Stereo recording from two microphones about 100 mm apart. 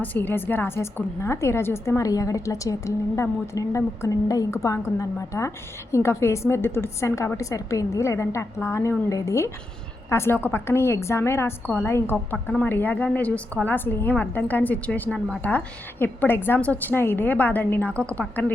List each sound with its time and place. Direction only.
0.0 s a woman's voice: 20° left (ahead or behind)